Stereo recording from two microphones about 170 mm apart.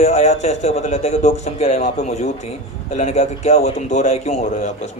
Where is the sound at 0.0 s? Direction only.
40° left (ahead or behind).